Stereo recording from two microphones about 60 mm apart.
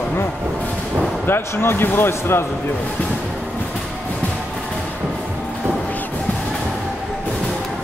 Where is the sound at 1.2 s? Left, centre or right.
Left.